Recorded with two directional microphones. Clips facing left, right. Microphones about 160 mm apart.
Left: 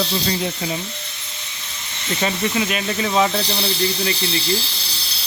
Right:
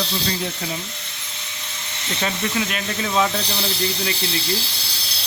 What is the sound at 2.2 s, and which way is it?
Speech, 5° left (ahead or behind).